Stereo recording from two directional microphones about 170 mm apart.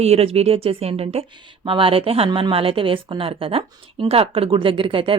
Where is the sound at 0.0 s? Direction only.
35° right (ahead or behind).